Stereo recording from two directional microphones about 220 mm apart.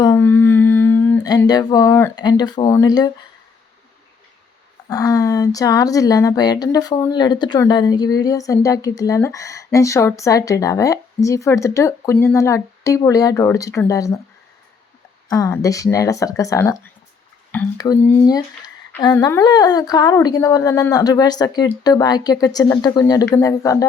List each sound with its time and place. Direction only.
0.0 s humming: 15° left (ahead or behind)
4.9 s speech: 15° left (ahead or behind)
15.3 s speech: 15° left (ahead or behind)